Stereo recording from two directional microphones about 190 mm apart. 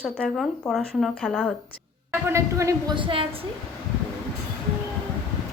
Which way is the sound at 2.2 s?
15° right (ahead or behind).